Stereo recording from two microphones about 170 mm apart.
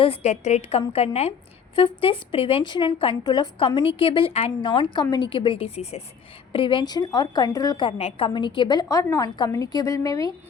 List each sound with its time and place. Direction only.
0.0 s a woman's voice: 35° left (ahead or behind); by 10.3 s 20° left (ahead or behind)